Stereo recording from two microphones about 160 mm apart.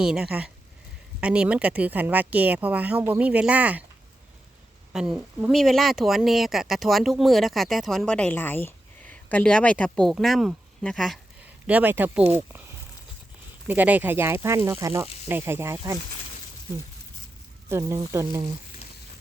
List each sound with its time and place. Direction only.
0.0 s speech: 5° right (ahead or behind)
4.9 s speech: 5° right (ahead or behind)
13.7 s speech: 10° right (ahead or behind)
17.7 s speech: 20° right (ahead or behind)
18.8 s frying: 40° left (ahead or behind)